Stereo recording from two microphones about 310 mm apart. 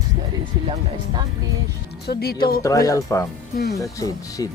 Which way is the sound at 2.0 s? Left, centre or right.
Left.